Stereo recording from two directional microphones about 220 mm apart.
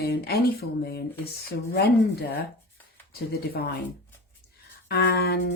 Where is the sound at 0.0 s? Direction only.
45° left (ahead or behind).